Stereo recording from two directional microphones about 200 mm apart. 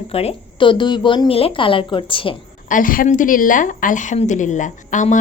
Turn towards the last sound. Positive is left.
turn(degrees=40)  # may be behind; listen again after turning